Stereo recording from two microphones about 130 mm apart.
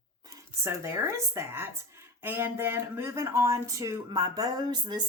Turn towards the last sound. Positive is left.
turn(degrees=-35)  # may be behind; listen again after turning